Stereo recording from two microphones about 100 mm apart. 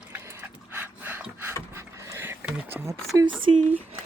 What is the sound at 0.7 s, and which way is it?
Wood, 20° right (ahead or behind).